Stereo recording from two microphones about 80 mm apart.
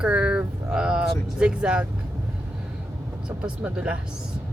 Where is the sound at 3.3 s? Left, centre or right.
Centre.